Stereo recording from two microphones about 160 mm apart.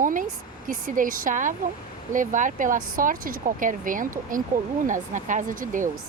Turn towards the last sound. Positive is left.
turn(degrees=-55)  # may be behind; listen again after turning